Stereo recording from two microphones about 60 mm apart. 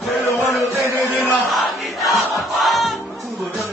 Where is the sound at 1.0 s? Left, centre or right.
Left.